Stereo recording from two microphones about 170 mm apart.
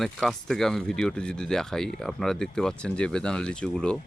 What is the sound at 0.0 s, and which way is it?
Speech, centre (ahead or behind).